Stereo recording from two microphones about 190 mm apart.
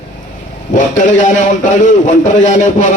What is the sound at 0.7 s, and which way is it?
A man's voice, 40° left (ahead or behind).